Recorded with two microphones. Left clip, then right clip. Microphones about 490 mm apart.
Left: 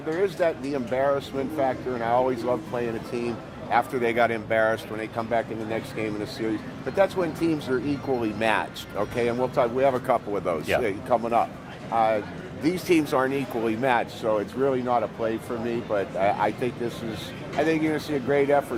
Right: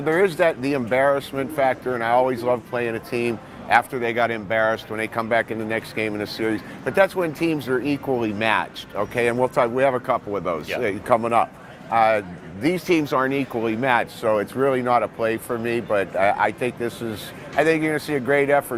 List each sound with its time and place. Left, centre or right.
0.1 s speech: right
12.6 s speech: right